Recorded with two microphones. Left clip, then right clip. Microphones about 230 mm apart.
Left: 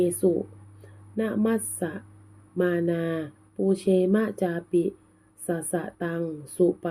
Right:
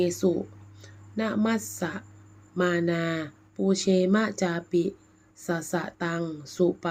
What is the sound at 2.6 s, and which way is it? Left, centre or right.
Speech, centre.